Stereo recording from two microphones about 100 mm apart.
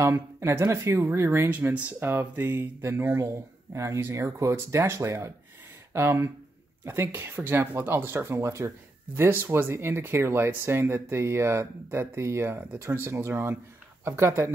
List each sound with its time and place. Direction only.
0.0 s speech: 30° right (ahead or behind)
1.5 s speech: 15° right (ahead or behind)